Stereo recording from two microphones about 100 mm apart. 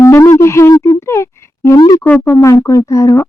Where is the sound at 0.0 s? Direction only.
25° left (ahead or behind).